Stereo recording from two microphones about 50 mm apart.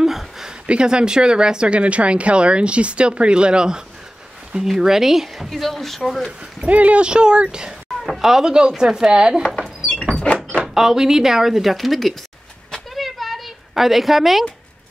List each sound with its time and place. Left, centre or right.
0.0 s a sound: centre
0.5 s speech: centre
6.6 s speech: right
8.0 s speech: centre
10.7 s speech: centre
12.9 s a sound: centre